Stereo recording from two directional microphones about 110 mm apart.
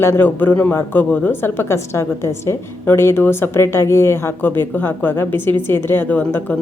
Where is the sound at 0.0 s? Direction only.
20° left (ahead or behind).